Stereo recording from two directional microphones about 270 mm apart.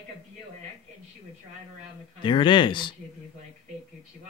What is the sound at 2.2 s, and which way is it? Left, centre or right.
Speech, centre.